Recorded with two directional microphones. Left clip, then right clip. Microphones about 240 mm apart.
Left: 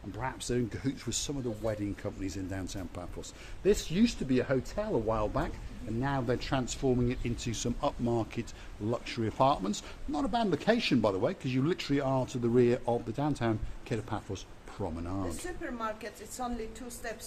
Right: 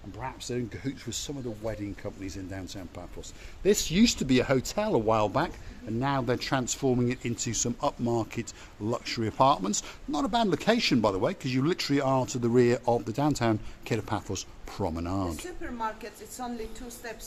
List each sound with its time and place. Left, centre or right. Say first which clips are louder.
0.2 s speech: left 1 dB; centre
3.8 s speech: right 5 dB; right
15.6 s speech: right 3 dB; centre